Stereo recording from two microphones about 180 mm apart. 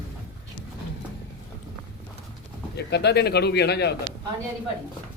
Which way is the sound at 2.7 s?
65° left (ahead or behind).